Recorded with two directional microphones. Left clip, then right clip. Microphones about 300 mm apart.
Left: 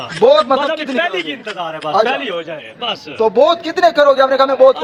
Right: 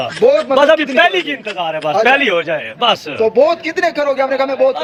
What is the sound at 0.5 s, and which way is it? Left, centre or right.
Speech, right.